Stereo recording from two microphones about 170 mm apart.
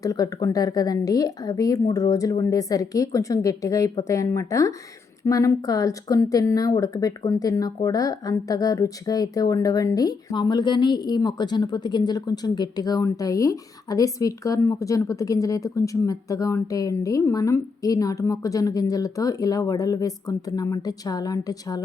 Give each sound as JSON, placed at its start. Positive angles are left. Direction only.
{"t": 0.0, "sound": "speech", "side_deg": 20}